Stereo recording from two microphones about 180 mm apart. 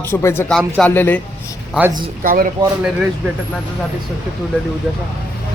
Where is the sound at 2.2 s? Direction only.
50° right (ahead or behind).